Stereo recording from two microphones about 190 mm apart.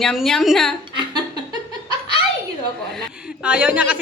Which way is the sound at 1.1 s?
20° right (ahead or behind).